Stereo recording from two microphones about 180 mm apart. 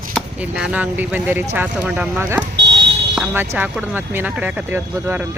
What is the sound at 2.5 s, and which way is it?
Speech, 75° right (ahead or behind).